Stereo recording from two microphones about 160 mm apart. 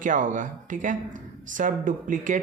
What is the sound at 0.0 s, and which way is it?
Speech, 55° right (ahead or behind).